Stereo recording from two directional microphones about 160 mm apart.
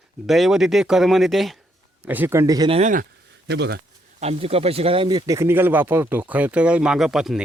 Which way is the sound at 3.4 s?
90° right.